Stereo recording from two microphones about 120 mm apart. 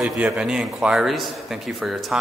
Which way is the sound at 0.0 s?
5° right (ahead or behind).